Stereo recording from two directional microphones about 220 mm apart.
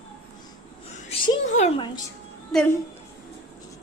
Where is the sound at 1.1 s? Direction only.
25° left (ahead or behind).